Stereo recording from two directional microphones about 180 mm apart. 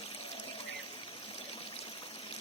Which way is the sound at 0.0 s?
30° left (ahead or behind).